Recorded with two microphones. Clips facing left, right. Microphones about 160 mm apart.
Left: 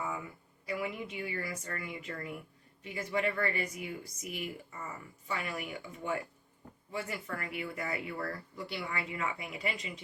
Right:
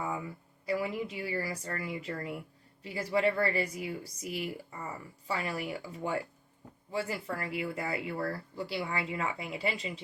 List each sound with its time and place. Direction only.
0.6 s speech: 35° right (ahead or behind)